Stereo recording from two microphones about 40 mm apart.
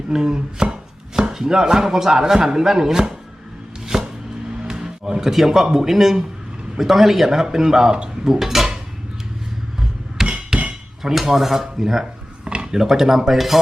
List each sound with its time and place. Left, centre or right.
0.1 s chopping: centre
3.8 s a sound: centre
4.6 s music: centre
5.3 s speech: centre
8.3 s dishes: centre
10.2 s hammer: centre
11.0 s speech: centre